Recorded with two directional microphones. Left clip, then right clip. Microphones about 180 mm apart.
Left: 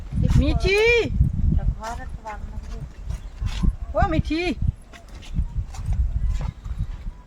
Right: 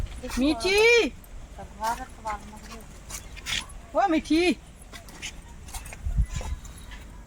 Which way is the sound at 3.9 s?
Centre (ahead or behind).